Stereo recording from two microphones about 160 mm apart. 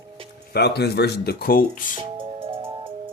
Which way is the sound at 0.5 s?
85° left.